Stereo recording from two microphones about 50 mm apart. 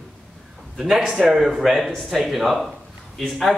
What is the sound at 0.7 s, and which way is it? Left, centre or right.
Speech, centre.